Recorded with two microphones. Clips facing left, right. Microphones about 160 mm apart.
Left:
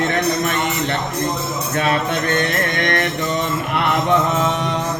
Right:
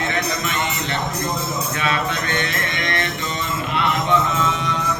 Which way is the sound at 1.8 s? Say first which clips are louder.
Left 6 dB; 50° left (ahead or behind).